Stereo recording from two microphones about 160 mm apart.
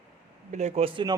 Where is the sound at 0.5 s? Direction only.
45° right (ahead or behind).